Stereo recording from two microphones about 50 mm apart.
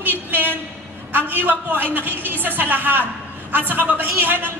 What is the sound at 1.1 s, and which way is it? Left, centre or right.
A man's voice, right.